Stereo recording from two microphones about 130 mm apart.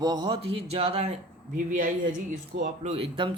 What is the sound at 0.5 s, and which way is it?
Speech, 50° right (ahead or behind).